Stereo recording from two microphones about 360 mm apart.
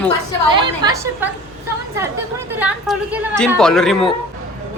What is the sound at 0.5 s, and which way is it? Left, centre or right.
Speech, centre.